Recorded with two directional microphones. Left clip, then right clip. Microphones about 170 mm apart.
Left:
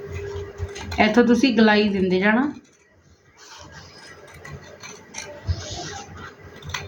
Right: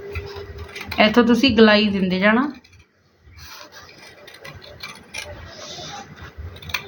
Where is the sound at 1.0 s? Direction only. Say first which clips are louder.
Right 2 dB; 30° right (ahead or behind).